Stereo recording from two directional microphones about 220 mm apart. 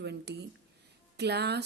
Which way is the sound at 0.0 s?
50° right (ahead or behind).